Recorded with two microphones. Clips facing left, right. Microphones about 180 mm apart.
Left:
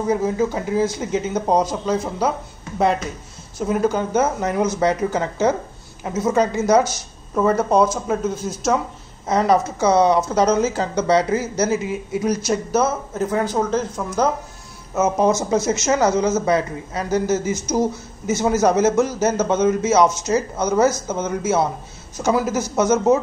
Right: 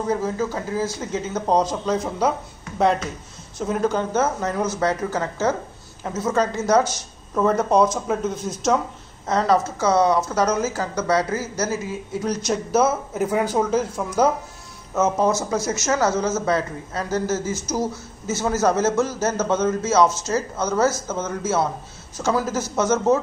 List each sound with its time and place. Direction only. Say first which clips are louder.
0.0 s speech: left 4 dB; 15° left (ahead or behind)
3.5 s speech: left 2 dB; 5° left (ahead or behind)
9.3 s speech: left 2 dB; 15° left (ahead or behind); by 14.3 s 10° right (ahead or behind)
15.0 s speech: left 2 dB; 15° left (ahead or behind)